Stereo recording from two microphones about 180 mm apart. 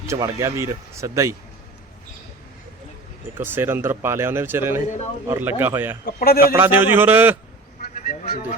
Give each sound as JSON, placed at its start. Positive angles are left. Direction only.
{"t": 0.1, "sound": "speech", "side_deg": -15}
{"t": 3.3, "sound": "speech", "side_deg": -10}
{"t": 6.1, "sound": "a man's voice", "side_deg": 55}
{"t": 6.5, "sound": "speech", "side_deg": -10}
{"t": 7.8, "sound": "a sound", "side_deg": 50}